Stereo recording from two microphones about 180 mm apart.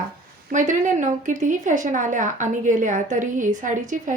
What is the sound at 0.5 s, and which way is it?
A woman's voice, 45° right (ahead or behind).